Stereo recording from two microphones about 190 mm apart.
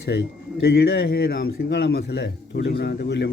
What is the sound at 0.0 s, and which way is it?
Speech, 60° left (ahead or behind).